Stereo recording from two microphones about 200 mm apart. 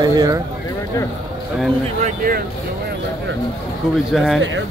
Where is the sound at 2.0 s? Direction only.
45° right (ahead or behind).